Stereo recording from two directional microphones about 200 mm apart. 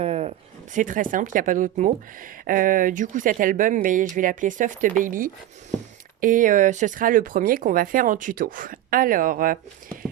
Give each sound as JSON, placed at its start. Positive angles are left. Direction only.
{"t": 0.0, "sound": "speech", "side_deg": -30}